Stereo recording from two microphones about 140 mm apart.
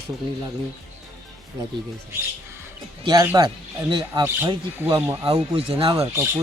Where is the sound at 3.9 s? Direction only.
35° right (ahead or behind).